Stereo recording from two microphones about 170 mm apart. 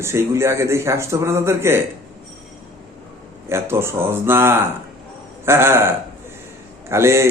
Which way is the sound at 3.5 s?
15° right (ahead or behind).